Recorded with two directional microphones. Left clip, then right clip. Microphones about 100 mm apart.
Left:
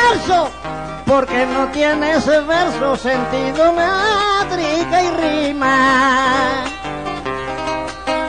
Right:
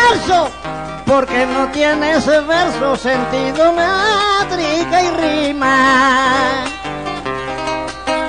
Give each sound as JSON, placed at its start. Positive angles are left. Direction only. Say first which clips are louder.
{"t": 0.0, "sound": "music", "louder": "right 2 dB", "side_deg": 30}
{"t": 7.6, "sound": "music", "louder": "right 2 dB", "side_deg": 35}